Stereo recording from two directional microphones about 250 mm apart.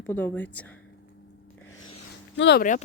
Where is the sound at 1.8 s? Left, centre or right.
Left.